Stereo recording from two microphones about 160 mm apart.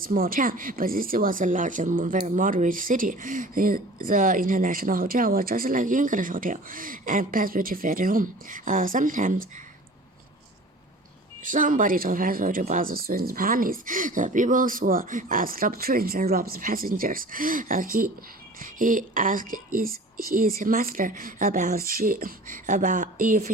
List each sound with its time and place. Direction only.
0.0 s speech: 60° right (ahead or behind)
11.4 s speech: 55° right (ahead or behind)